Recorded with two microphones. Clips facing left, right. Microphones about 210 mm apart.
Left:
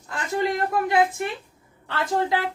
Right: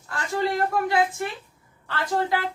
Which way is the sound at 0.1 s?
20° left (ahead or behind).